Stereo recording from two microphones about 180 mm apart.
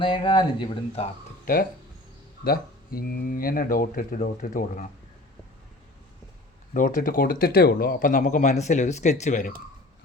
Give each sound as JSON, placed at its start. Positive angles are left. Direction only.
{"t": 0.0, "sound": "speech", "side_deg": 30}
{"t": 1.5, "sound": "speech", "side_deg": 50}
{"t": 6.7, "sound": "speech", "side_deg": 45}